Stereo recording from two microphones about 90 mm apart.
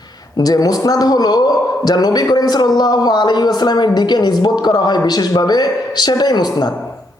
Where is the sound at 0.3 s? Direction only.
45° left (ahead or behind).